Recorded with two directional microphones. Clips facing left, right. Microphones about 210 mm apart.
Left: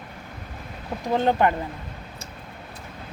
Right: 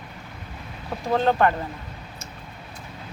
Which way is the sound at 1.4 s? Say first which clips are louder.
Even; 15° left (ahead or behind).